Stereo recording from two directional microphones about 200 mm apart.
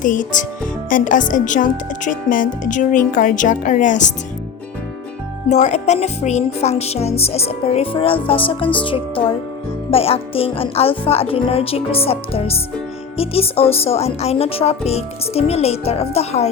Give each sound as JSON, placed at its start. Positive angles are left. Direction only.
{"t": 0.0, "sound": "speech", "side_deg": 40}
{"t": 5.5, "sound": "speech", "side_deg": 35}